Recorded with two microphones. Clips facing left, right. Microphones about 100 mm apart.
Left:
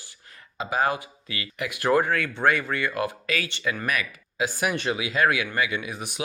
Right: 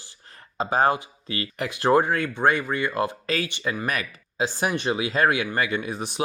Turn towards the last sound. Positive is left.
turn(degrees=-35)  # may be behind; listen again after turning